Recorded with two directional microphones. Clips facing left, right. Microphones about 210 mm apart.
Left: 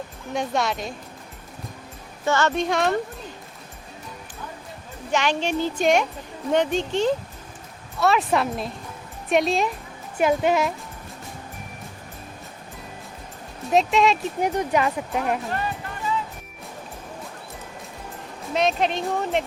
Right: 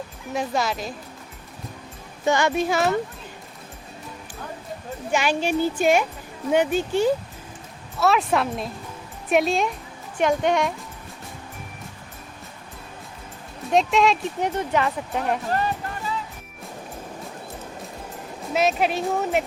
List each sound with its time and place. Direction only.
0.3 s speech: centre (ahead or behind)
2.2 s a woman's voice: 15° right (ahead or behind)
5.1 s a woman's voice: 10° right (ahead or behind)
13.7 s speech: centre (ahead or behind)
14.5 s speech: 15° left (ahead or behind)
15.4 s music: 35° right (ahead or behind)
18.5 s speech: 5° right (ahead or behind)